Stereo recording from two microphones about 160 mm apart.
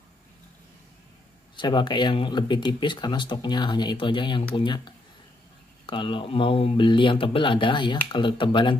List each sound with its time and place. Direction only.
1.6 s speech: 30° left (ahead or behind)